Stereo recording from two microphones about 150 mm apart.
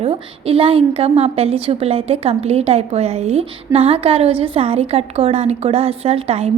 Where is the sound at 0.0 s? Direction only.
40° right (ahead or behind).